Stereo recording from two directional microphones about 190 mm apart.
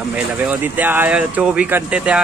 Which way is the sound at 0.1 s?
5° right (ahead or behind).